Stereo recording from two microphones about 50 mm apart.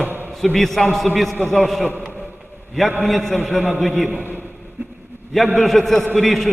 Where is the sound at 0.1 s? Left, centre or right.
Right.